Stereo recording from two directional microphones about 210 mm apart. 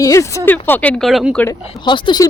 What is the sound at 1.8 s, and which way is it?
Speech, 20° left (ahead or behind).